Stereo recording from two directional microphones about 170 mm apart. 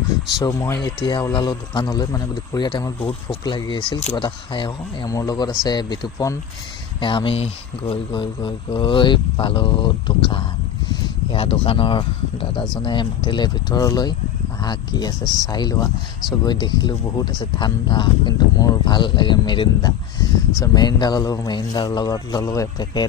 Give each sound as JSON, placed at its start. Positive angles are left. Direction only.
{"t": 0.3, "sound": "speech", "side_deg": 25}